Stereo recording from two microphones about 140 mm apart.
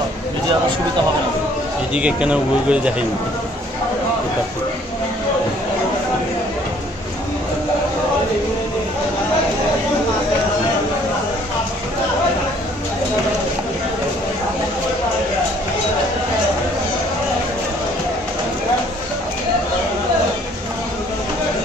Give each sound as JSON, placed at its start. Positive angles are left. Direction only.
{"t": 2.0, "sound": "speech", "side_deg": -10}